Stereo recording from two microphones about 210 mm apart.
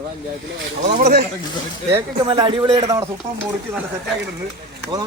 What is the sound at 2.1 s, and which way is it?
Speech, 25° right (ahead or behind).